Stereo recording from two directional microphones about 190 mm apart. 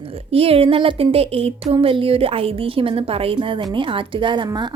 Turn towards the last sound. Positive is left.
turn(degrees=-25)  # may be behind; listen again after turning